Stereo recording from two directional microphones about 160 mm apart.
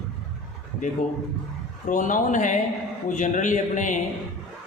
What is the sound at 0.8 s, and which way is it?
A man's voice, 50° left (ahead or behind).